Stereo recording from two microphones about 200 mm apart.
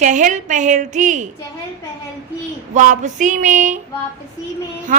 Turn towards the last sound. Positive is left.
turn(degrees=-35)  # may be behind; listen again after turning